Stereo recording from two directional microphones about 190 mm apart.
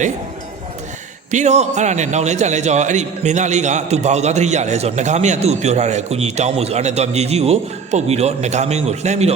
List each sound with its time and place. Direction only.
1.3 s a man's voice: 40° right (ahead or behind)